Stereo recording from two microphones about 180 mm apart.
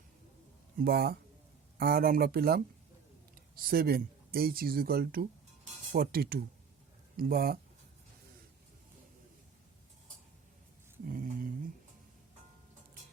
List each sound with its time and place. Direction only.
0.8 s speech: 60° right (ahead or behind)
3.6 s speech: 55° right (ahead or behind)
11.1 s a sound: 50° right (ahead or behind)